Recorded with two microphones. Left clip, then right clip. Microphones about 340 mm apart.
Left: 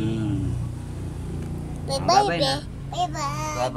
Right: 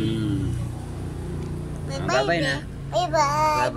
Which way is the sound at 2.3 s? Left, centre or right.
Centre.